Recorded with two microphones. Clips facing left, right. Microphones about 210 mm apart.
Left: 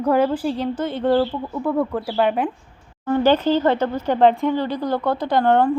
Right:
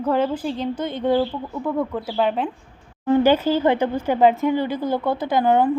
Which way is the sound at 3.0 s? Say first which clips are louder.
Even; 15° right (ahead or behind).